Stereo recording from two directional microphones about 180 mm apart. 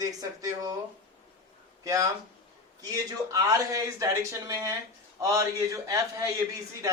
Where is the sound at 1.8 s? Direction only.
20° right (ahead or behind).